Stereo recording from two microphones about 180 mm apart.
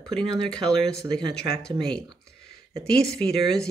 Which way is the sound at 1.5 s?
65° left (ahead or behind).